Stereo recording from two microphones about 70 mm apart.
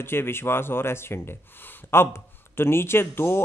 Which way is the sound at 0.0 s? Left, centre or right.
Left.